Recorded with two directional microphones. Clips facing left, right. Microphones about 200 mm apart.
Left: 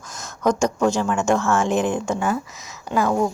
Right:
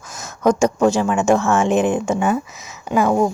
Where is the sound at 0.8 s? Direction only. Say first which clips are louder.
Right 3 dB; 20° right (ahead or behind).